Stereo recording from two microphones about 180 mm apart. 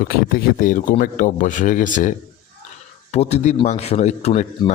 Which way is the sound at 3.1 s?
40° left (ahead or behind).